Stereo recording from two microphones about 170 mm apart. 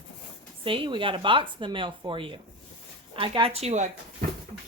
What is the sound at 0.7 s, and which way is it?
Speech, 30° right (ahead or behind).